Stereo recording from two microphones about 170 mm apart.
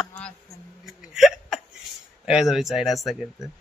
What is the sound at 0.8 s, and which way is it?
Hiccup, centre (ahead or behind).